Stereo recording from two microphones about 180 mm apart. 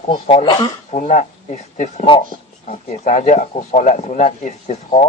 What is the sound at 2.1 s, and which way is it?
Speech, 30° left (ahead or behind).